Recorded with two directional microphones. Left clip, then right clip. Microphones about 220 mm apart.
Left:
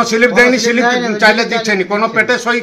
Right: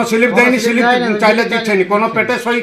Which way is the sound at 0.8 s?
35° right (ahead or behind).